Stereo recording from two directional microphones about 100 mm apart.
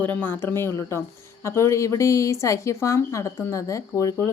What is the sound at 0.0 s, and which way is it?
Speech, 15° left (ahead or behind).